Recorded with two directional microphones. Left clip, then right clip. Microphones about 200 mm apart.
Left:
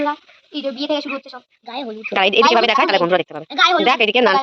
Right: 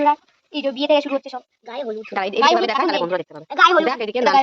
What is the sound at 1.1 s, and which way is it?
Speech, 40° right (ahead or behind).